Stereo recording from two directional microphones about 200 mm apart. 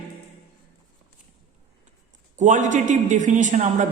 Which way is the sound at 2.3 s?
35° right (ahead or behind).